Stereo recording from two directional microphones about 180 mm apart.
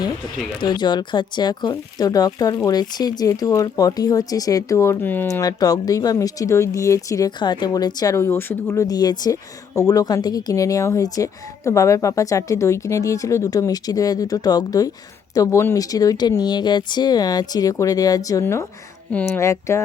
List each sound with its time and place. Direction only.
0.6 s speech: 25° left (ahead or behind)